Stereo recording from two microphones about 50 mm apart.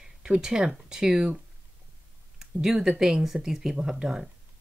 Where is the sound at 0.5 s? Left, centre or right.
Centre.